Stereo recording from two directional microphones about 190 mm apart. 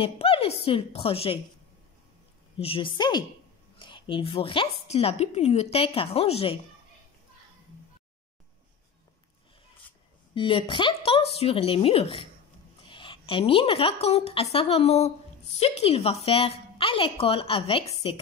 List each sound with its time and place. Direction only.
0.0 s a woman's voice: 30° left (ahead or behind)
2.6 s a woman's voice: 30° left (ahead or behind)
10.3 s a woman's voice: 25° left (ahead or behind)